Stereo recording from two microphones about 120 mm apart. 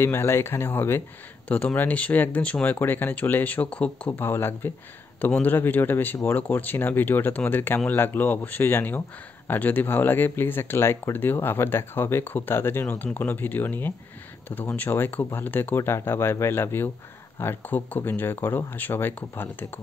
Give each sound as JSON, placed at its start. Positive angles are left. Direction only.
{"t": 0.0, "sound": "speech", "side_deg": 20}